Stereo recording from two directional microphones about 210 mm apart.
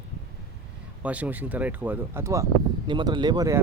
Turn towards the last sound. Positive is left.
turn(degrees=-15)  # may be behind; listen again after turning